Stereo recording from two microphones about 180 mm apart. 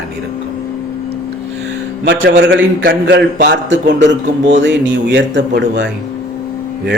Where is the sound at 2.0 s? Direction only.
75° right (ahead or behind).